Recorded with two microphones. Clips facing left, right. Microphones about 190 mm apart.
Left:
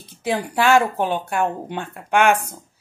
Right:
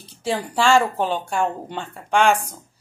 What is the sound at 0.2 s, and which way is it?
Speech, 15° left (ahead or behind).